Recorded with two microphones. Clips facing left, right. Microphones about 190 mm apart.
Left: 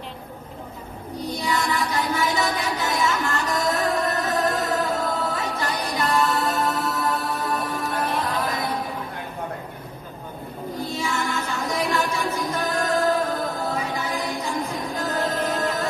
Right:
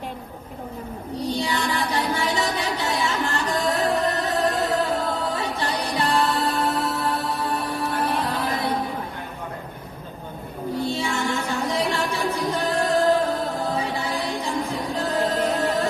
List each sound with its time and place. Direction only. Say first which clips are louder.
1.3 s music: left 1 dB; 35° right (ahead or behind)
8.4 s a sound: even; 35° right (ahead or behind)
10.8 s music: right 2 dB; 30° right (ahead or behind)